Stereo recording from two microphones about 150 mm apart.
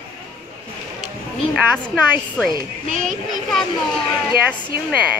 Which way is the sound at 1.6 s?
10° right (ahead or behind).